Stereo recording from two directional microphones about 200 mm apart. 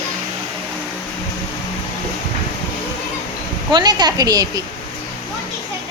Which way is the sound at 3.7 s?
20° right (ahead or behind).